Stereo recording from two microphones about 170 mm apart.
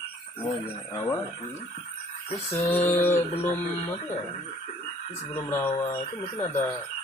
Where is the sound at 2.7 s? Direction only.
10° left (ahead or behind).